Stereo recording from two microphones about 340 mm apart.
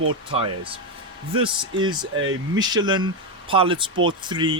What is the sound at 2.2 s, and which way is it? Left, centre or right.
Speech, right.